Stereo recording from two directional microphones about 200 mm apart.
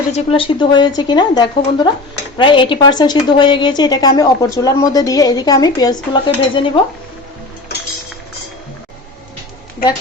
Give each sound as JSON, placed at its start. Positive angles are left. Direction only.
{"t": 0.1, "sound": "a woman's voice", "side_deg": 25}